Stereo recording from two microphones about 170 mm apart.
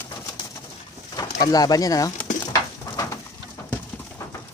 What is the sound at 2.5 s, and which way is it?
Pigeon, 20° left (ahead or behind).